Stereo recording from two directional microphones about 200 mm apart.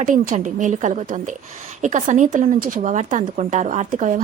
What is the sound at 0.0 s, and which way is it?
A woman's voice, 40° right (ahead or behind).